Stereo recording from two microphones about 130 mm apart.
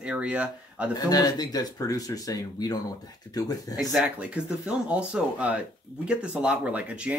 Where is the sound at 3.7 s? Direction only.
5° right (ahead or behind).